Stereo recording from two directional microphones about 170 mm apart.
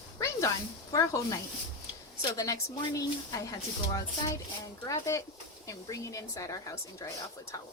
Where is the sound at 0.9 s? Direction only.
20° left (ahead or behind).